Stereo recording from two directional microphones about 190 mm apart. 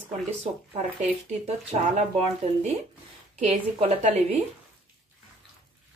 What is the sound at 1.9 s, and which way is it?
A woman's voice, 35° right (ahead or behind).